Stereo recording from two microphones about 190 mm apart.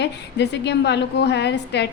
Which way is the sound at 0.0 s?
65° left (ahead or behind).